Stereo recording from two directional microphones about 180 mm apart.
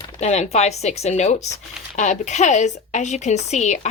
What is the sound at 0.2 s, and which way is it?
Speech, 40° left (ahead or behind).